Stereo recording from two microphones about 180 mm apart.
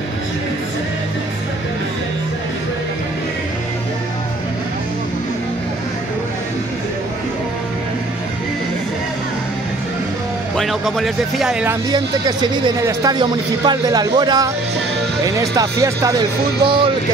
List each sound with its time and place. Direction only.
10.5 s speech: centre (ahead or behind)
11.9 s speech: 25° right (ahead or behind)